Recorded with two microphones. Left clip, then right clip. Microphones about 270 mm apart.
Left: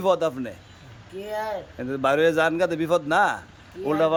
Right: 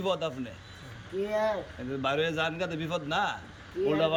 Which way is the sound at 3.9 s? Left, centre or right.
Centre.